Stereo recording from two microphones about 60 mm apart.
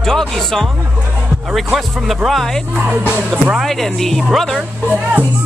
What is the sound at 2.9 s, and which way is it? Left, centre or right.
Speech, right.